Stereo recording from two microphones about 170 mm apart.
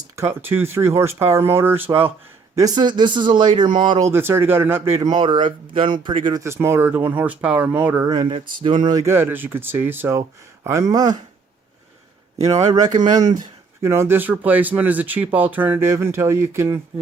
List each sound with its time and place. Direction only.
0.2 s speech: 15° right (ahead or behind)
2.6 s a man's voice: 25° right (ahead or behind)
4.1 s a man's voice: 15° right (ahead or behind)
6.4 s speech: 15° right (ahead or behind)
8.0 s a man's voice: 25° right (ahead or behind)
12.4 s a man's voice: 20° right (ahead or behind)